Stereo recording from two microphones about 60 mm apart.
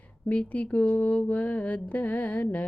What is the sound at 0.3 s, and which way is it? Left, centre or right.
Speech, left.